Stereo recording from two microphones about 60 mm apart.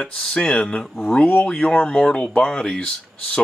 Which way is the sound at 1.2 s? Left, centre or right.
Left.